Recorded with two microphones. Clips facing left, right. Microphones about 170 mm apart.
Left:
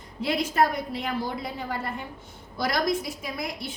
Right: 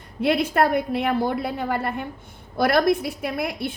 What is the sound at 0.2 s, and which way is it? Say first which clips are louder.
A woman's voice: right 4 dB; 60° right (ahead or behind).